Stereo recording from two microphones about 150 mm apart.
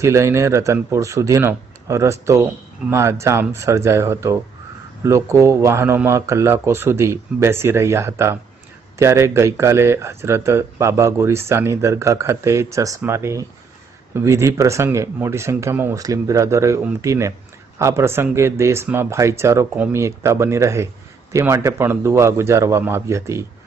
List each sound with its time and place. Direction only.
0.0 s a man's voice: 20° right (ahead or behind)